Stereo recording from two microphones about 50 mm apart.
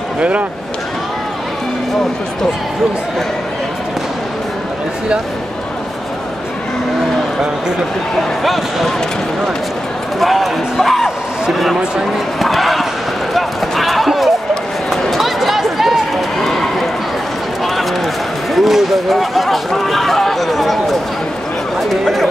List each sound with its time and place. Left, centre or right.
0.2 s speech: right
8.5 s speech: centre
10.2 s speech: centre
12.4 s a sound: centre
13.3 s basketball bounce: centre
15.0 s run: centre
18.5 s speech: centre